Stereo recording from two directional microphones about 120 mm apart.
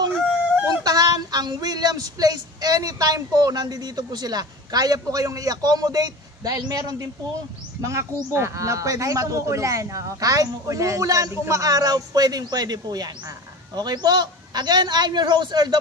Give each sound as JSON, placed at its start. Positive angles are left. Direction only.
{"t": 0.8, "sound": "child singing", "side_deg": -30}
{"t": 7.8, "sound": "speech", "side_deg": -25}
{"t": 13.7, "sound": "child singing", "side_deg": -35}